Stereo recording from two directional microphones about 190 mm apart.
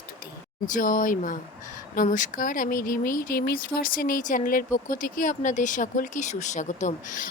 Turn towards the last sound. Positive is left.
turn(degrees=40)  # may be behind; listen again after turning